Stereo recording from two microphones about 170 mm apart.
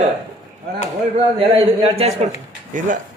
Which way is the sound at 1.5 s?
35° right (ahead or behind).